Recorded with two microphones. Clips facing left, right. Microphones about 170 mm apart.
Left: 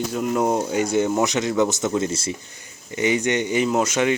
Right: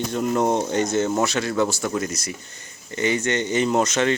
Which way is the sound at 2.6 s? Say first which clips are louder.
Right 1 dB; 15° left (ahead or behind).